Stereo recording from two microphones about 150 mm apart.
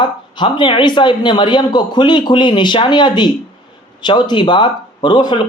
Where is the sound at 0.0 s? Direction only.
30° left (ahead or behind).